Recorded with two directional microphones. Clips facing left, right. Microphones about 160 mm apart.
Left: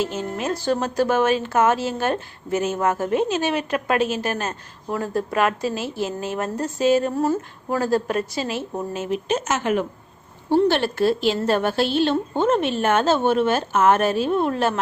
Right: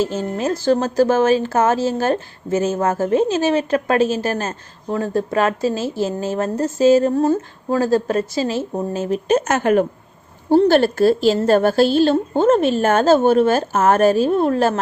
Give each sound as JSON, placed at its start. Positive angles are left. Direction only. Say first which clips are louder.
{"t": 0.0, "sound": "speech", "louder": "right 4 dB", "side_deg": -35}